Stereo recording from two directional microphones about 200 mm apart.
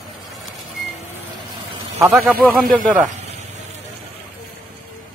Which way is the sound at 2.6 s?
45° right (ahead or behind).